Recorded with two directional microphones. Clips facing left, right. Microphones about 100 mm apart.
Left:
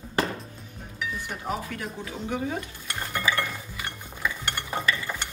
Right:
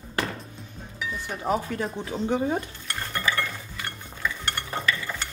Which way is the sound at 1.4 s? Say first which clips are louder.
Right 7 dB; 25° right (ahead or behind).